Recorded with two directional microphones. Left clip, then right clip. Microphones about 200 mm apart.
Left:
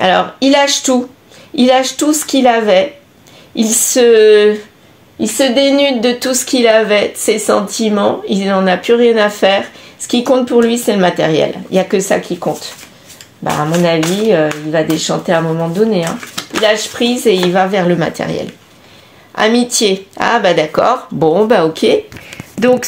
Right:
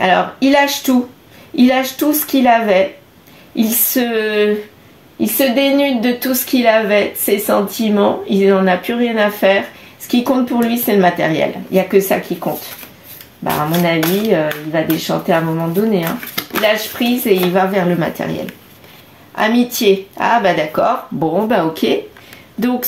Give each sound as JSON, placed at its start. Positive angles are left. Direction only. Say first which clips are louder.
{"t": 0.0, "sound": "a woman's voice", "louder": "left 2 dB", "side_deg": 45}
{"t": 13.4, "sound": "speech", "louder": "left 3 dB", "side_deg": 40}
{"t": 16.6, "sound": "a woman's voice", "louder": "left 3 dB", "side_deg": 45}